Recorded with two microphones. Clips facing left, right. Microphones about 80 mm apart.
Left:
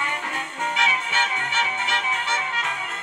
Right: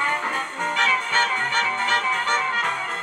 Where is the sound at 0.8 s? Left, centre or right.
Right.